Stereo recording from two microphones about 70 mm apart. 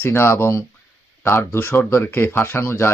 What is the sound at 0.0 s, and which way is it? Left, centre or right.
Speech, left.